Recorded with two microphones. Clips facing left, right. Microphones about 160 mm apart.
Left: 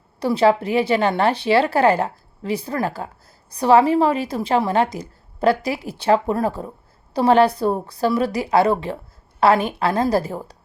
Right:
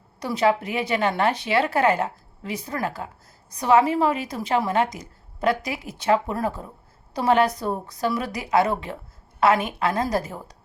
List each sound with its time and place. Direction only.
0.2 s a woman's voice: 30° left (ahead or behind)